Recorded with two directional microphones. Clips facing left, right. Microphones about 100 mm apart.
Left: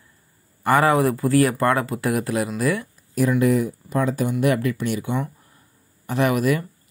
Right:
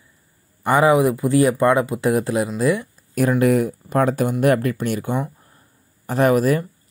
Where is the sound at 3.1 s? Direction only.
60° right (ahead or behind).